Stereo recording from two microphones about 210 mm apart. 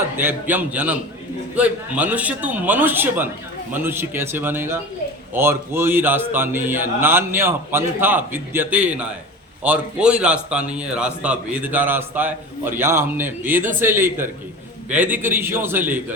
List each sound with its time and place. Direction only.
0.2 s a man's voice: 10° right (ahead or behind)